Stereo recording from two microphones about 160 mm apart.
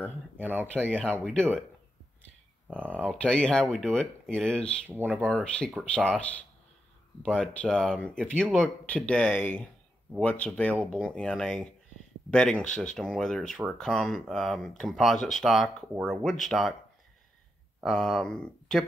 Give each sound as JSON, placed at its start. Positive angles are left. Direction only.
{"t": 0.8, "sound": "speech", "side_deg": 5}
{"t": 2.9, "sound": "speech", "side_deg": 5}
{"t": 4.8, "sound": "speech", "side_deg": -10}
{"t": 5.2, "sound": "speech", "side_deg": 5}
{"t": 7.5, "sound": "speech", "side_deg": 5}
{"t": 15.1, "sound": "speech", "side_deg": 50}
{"t": 15.4, "sound": "speech", "side_deg": 0}
{"t": 17.7, "sound": "speech", "side_deg": 0}